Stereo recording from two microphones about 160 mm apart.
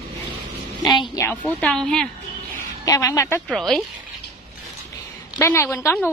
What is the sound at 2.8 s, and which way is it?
Speech, 20° left (ahead or behind).